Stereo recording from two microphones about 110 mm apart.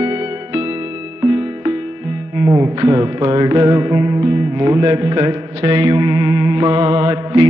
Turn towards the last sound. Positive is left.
turn(degrees=-35)  # may be behind; listen again after turning